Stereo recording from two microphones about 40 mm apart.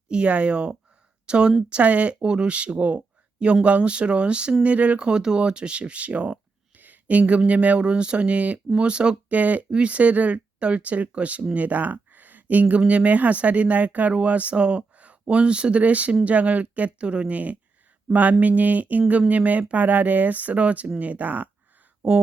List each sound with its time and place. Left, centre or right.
0.1 s speech: right
1.7 s speech: right
2.2 s speech: right
6.7 s speech: right
9.4 s speech: right
14.1 s speech: right
17.3 s speech: right
22.0 s speech: right